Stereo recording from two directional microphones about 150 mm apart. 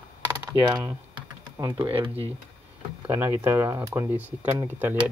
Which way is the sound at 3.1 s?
15° right (ahead or behind).